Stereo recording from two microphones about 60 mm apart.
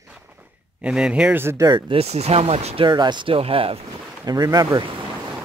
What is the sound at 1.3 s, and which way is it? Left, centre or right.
Speech, right.